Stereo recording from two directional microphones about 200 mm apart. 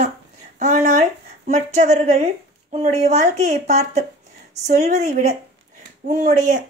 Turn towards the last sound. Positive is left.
turn(degrees=-40)  # may be behind; listen again after turning